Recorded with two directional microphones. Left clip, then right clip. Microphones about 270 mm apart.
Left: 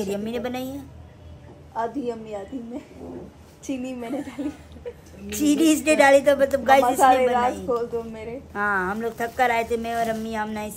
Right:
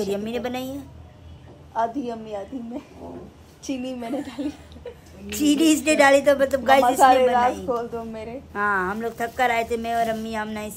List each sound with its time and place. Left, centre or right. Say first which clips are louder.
0.0 s a woman's voice: right 1 dB; centre
1.7 s a woman's voice: right 2 dB; centre
4.0 s a woman's voice: right 1 dB; centre
7.6 s a woman's voice: left 1 dB; centre
8.5 s a woman's voice: right 1 dB; centre